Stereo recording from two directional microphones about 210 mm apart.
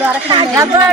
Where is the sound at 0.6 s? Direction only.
15° right (ahead or behind).